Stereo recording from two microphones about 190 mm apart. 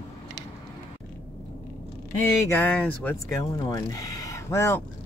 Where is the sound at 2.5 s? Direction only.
10° left (ahead or behind).